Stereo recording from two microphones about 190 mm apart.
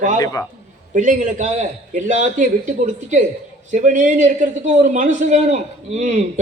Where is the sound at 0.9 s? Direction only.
40° right (ahead or behind).